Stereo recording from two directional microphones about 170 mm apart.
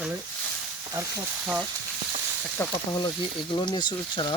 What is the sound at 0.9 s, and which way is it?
Speech, 20° right (ahead or behind).